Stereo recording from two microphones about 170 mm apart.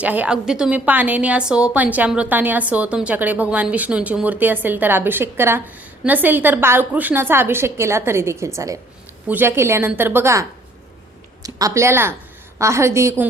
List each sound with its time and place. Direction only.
0.0 s a woman's voice: 10° right (ahead or behind)
11.4 s a woman's voice: 20° right (ahead or behind)